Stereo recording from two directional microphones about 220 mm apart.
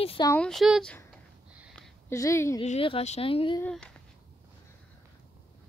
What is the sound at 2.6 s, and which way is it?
Speech, 30° left (ahead or behind).